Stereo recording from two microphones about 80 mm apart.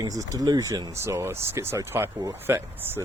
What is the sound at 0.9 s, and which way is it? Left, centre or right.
Speech, right.